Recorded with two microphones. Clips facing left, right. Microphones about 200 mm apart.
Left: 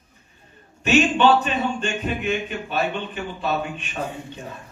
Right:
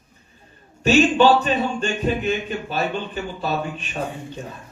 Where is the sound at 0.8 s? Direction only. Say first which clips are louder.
Right 2 dB; 35° right (ahead or behind).